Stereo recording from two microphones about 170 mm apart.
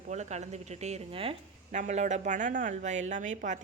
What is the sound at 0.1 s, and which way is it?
A woman's voice, 40° right (ahead or behind).